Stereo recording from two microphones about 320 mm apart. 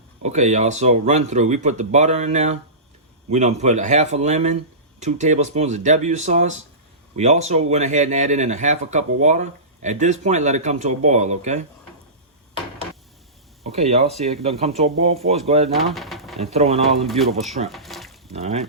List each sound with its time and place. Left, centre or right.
0.2 s speech: right
13.7 s speech: centre
15.7 s speech: centre
16.4 s speech: centre
17.1 s speech: centre
17.7 s a sound: centre
18.3 s speech: centre